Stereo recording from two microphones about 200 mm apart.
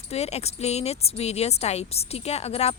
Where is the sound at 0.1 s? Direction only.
30° left (ahead or behind).